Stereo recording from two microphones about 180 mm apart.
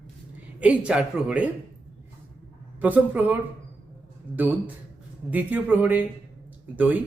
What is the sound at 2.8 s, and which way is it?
Speech, 10° right (ahead or behind).